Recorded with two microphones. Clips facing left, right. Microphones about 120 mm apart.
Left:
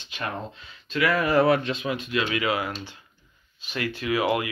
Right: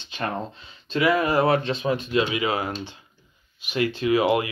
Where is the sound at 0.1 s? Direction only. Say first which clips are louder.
Right 4 dB; 30° right (ahead or behind).